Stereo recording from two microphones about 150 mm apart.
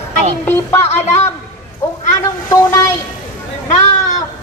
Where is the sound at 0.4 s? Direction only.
15° left (ahead or behind).